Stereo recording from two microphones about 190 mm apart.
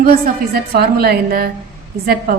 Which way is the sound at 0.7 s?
55° right (ahead or behind).